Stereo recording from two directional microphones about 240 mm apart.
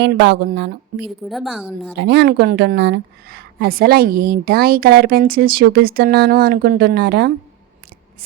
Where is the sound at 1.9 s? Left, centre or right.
Right.